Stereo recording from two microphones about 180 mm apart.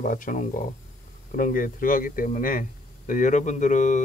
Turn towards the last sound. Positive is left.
turn(degrees=45)  # may be behind; listen again after turning